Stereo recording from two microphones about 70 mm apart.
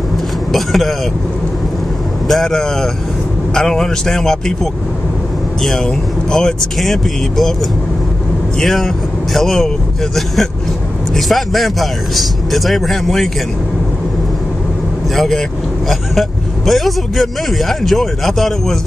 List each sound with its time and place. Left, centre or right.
0.5 s speech: centre
2.2 s a man's voice: centre
5.6 s speech: centre
8.5 s a man's voice: centre
15.1 s speech: centre